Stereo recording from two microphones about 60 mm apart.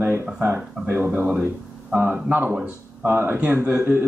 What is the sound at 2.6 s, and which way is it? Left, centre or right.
A man's voice, right.